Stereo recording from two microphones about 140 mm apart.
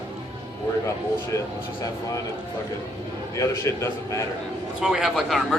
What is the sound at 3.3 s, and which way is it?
Speech, 20° left (ahead or behind).